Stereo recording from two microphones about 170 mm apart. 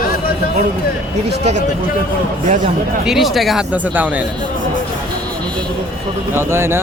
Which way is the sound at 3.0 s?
Centre (ahead or behind).